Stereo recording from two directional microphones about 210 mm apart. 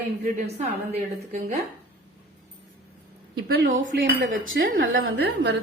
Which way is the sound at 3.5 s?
45° right (ahead or behind).